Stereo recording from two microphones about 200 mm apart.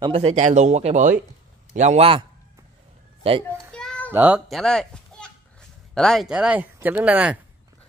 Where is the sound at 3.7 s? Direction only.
5° left (ahead or behind).